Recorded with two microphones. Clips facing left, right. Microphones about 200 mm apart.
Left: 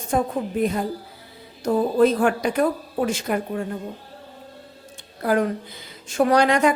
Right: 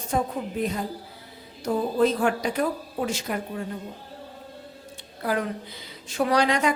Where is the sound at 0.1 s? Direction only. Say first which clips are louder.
Left 4 dB; 55° left (ahead or behind).